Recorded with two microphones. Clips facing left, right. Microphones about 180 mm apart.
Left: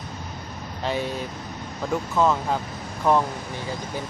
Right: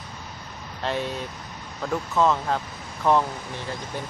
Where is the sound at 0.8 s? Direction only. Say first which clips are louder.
Left 1 dB; 5° left (ahead or behind).